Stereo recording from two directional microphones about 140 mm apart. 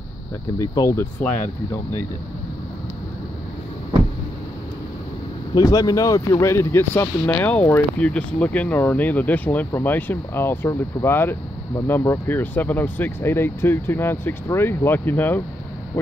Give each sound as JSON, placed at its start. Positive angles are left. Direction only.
{"t": 0.6, "sound": "speech", "side_deg": 25}
{"t": 1.2, "sound": "speech", "side_deg": 15}
{"t": 5.5, "sound": "speech", "side_deg": 25}